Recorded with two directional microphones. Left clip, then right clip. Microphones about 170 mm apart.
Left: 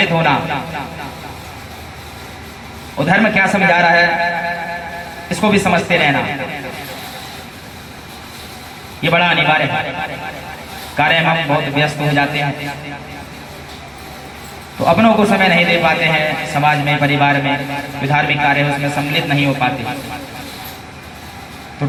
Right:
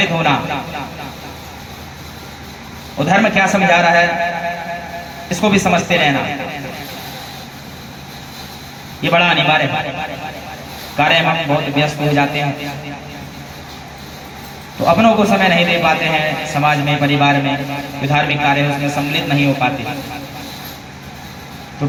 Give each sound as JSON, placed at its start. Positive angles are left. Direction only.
{"t": 0.0, "sound": "a man's voice", "side_deg": 30}
{"t": 3.1, "sound": "a man's voice", "side_deg": 30}
{"t": 9.0, "sound": "a man's voice", "side_deg": 30}
{"t": 10.9, "sound": "a man's voice", "side_deg": 30}
{"t": 14.8, "sound": "a man's voice", "side_deg": 30}